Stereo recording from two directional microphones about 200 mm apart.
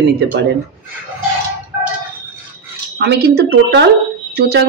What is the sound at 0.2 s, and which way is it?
Speech, 55° right (ahead or behind).